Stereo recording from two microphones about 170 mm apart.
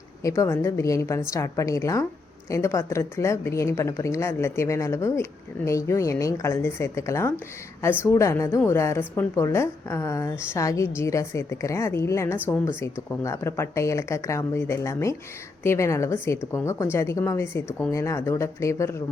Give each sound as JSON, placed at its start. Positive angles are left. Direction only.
{"t": 0.2, "sound": "a woman's voice", "side_deg": 20}